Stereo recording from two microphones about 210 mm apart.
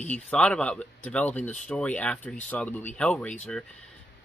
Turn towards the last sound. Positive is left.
turn(degrees=5)  # may be behind; listen again after turning